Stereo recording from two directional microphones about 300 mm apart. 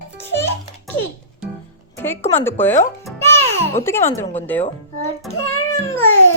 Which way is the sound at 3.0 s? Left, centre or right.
Centre.